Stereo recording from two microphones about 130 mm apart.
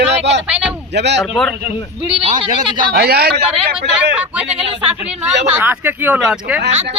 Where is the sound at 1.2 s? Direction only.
5° left (ahead or behind).